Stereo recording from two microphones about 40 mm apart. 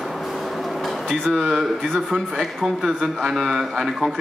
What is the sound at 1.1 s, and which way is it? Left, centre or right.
Speech, centre.